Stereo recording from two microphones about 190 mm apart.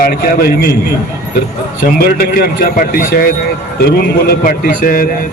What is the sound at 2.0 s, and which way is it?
A man's voice, 55° left (ahead or behind).